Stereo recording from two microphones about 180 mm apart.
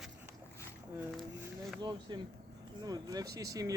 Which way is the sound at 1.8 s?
25° right (ahead or behind).